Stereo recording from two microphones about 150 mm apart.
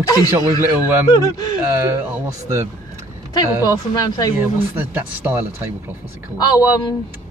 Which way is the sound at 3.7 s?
25° left (ahead or behind).